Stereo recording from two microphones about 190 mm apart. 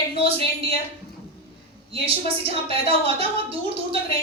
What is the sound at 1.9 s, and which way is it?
A woman's voice, 30° right (ahead or behind).